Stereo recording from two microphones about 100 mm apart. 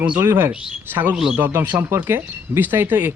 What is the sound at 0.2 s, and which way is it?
Speech, 25° right (ahead or behind).